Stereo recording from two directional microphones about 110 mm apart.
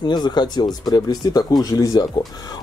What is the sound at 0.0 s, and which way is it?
Speech, 40° left (ahead or behind).